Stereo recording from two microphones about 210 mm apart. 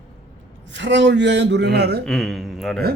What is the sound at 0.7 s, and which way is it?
A man's voice, 60° right (ahead or behind).